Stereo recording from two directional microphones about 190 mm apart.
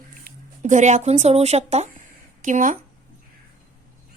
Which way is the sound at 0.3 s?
50° right (ahead or behind).